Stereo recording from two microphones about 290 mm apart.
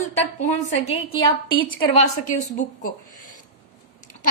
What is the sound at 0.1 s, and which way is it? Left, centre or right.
A woman's voice, left.